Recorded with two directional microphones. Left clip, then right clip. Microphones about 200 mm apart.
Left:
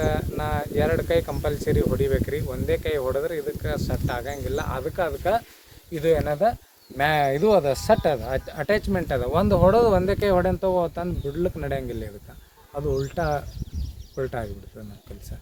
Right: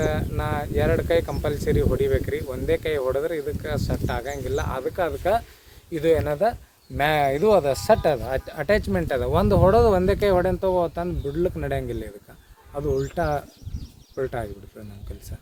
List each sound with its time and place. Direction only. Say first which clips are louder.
0.0 s speech: even; 15° right (ahead or behind)